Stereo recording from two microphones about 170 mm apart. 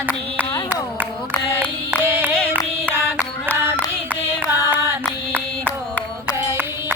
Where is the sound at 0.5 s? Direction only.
20° left (ahead or behind).